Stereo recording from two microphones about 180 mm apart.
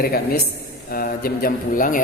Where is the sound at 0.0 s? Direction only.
55° left (ahead or behind).